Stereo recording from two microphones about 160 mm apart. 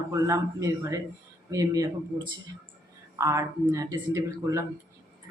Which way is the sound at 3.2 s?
20° right (ahead or behind).